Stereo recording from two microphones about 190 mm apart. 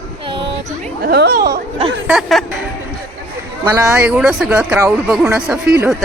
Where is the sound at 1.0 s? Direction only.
55° right (ahead or behind).